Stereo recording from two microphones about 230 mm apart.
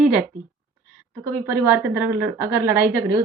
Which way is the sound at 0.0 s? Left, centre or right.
Centre.